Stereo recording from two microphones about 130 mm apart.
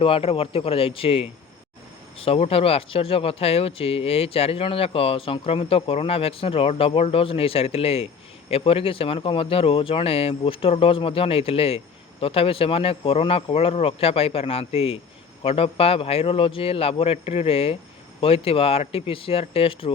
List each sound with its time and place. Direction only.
0.0 s speech: 45° left (ahead or behind)